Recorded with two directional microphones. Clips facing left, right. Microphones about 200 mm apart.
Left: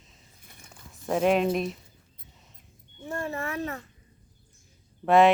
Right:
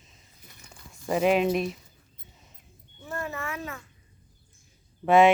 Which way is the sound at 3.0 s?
30° left (ahead or behind).